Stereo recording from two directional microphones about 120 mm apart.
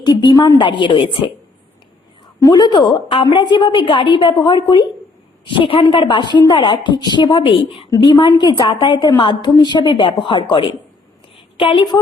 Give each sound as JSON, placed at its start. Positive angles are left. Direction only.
{"t": 0.0, "sound": "a woman's voice", "side_deg": 35}
{"t": 2.4, "sound": "a woman's voice", "side_deg": 35}
{"t": 5.5, "sound": "a woman's voice", "side_deg": 50}
{"t": 7.9, "sound": "a woman's voice", "side_deg": 35}